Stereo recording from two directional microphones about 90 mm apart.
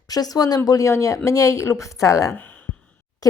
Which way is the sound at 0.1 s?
45° left (ahead or behind).